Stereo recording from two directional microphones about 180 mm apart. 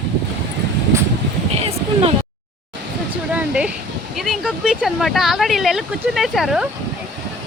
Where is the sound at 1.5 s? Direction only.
35° right (ahead or behind).